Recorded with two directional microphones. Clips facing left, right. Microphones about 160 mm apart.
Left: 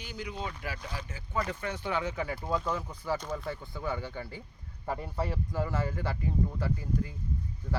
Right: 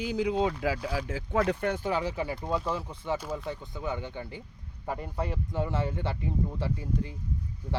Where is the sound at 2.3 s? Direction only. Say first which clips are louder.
Right 1 dB; 20° right (ahead or behind).